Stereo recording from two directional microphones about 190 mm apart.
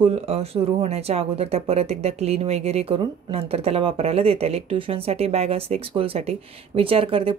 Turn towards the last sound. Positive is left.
turn(degrees=-30)  # may be behind; listen again after turning